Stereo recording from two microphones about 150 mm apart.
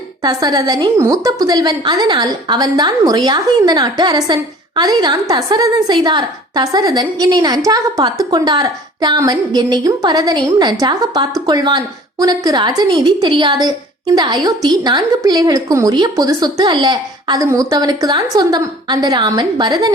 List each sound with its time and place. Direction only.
0.2 s a woman's voice: 25° right (ahead or behind)